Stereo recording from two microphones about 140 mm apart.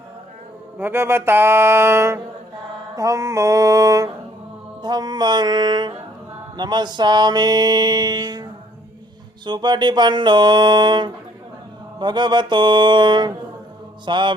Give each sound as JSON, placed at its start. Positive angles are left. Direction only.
{"t": 0.8, "sound": "speech", "side_deg": -15}
{"t": 2.9, "sound": "music", "side_deg": -25}
{"t": 4.8, "sound": "speech", "side_deg": -30}
{"t": 6.6, "sound": "music", "side_deg": -30}
{"t": 9.5, "sound": "speech", "side_deg": -30}